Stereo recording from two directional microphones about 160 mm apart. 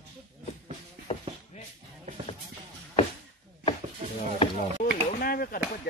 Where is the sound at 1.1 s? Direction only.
40° left (ahead or behind).